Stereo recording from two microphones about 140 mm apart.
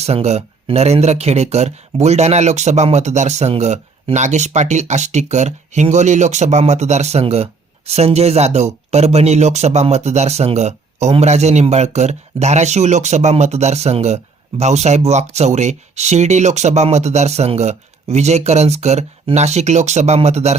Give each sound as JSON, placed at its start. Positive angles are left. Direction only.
{"t": 0.0, "sound": "speech", "side_deg": -50}